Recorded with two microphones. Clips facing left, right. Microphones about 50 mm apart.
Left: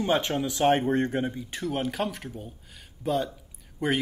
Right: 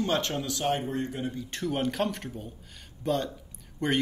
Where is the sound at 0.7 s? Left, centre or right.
Left.